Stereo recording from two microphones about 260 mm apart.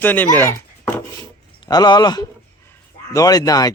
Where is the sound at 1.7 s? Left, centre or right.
Centre.